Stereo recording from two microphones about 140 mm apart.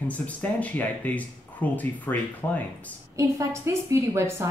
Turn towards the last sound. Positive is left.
turn(degrees=-20)  # may be behind; listen again after turning